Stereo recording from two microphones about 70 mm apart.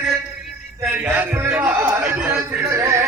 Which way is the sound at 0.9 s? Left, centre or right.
Right.